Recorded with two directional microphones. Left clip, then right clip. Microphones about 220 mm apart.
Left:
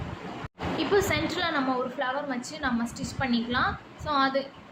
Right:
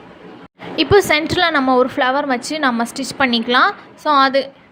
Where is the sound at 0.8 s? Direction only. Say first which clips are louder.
Right 12 dB; 40° right (ahead or behind).